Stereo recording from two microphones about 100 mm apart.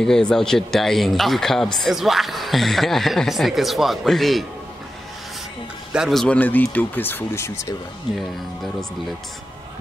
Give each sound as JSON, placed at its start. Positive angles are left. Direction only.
{"t": 0.0, "sound": "speech", "side_deg": 5}
{"t": 5.9, "sound": "speech", "side_deg": 0}
{"t": 6.2, "sound": "speech", "side_deg": 15}